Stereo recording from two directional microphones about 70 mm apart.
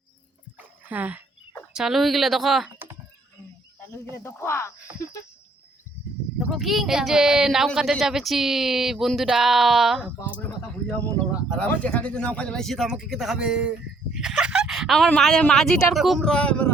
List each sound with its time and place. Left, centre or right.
0.9 s speech: right
1.7 s speech: centre
4.1 s speech: left
6.5 s speech: centre
11.4 s speech: centre
12.6 s speech: centre
14.1 s a sound: centre
14.9 s speech: centre
16.0 s speech: centre
16.2 s speech: centre